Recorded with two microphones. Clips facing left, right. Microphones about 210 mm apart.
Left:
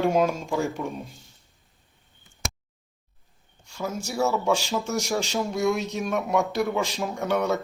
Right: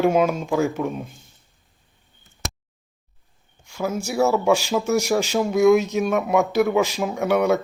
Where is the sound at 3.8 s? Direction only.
10° right (ahead or behind).